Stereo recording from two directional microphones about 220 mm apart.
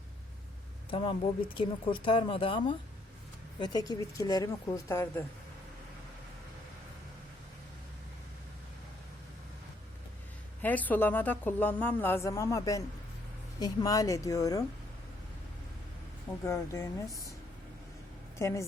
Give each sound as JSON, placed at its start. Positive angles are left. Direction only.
{"t": 0.9, "sound": "a woman's voice", "side_deg": 25}
{"t": 10.6, "sound": "a woman's voice", "side_deg": 5}
{"t": 16.5, "sound": "a woman's voice", "side_deg": 15}
{"t": 18.3, "sound": "a woman's voice", "side_deg": 15}